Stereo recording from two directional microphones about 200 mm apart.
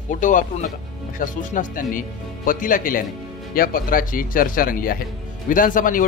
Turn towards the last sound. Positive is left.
turn(degrees=40)  # may be behind; listen again after turning